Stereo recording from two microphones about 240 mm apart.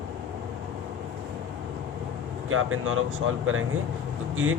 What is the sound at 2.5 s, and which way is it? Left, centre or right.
Speech, right.